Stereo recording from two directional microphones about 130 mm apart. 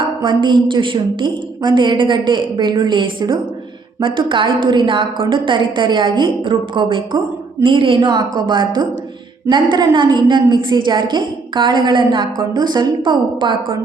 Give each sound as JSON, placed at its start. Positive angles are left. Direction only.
{"t": 0.2, "sound": "a woman's voice", "side_deg": -35}